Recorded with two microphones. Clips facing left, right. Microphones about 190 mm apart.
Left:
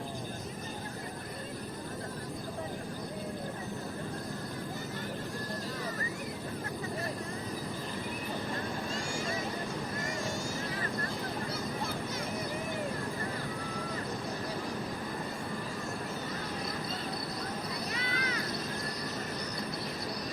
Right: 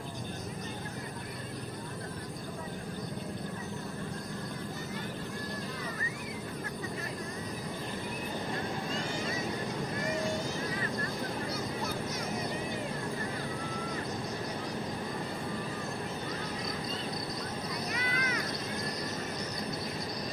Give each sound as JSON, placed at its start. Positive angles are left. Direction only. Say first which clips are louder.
{"t": 17.9, "sound": "vehicle", "louder": "right 1 dB", "side_deg": 30}